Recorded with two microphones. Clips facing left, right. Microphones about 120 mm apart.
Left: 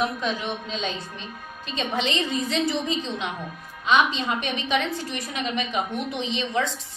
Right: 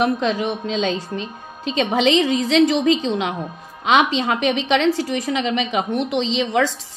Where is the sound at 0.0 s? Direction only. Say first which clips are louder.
Right 7 dB; 90° right.